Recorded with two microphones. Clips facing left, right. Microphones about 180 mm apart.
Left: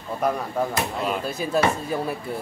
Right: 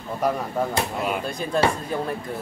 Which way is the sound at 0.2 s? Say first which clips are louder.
Even; centre (ahead or behind).